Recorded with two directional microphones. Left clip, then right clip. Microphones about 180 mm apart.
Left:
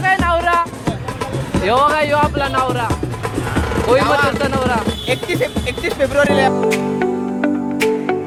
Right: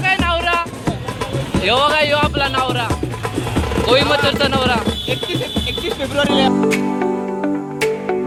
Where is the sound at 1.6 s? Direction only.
15° left (ahead or behind).